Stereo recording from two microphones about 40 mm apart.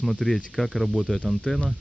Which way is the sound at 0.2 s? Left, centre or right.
Centre.